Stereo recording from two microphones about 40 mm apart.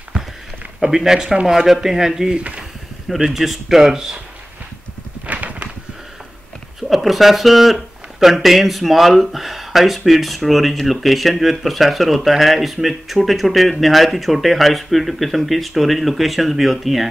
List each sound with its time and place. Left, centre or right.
0.7 s speech: centre
2.3 s speech: right
3.3 s speech: centre
5.2 s clip-clop: right
6.9 s speech: centre